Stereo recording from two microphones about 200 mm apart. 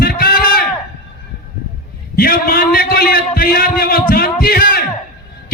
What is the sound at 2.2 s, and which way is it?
A man's voice, 50° left (ahead or behind).